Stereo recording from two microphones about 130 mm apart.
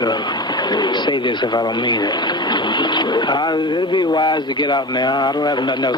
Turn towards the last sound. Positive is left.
turn(degrees=35)  # may be behind; listen again after turning